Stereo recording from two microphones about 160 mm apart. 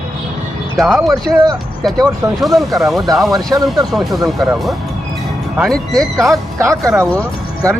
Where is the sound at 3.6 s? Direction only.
Centre (ahead or behind).